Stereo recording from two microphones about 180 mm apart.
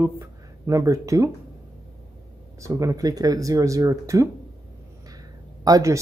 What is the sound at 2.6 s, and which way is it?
Speech, 15° right (ahead or behind).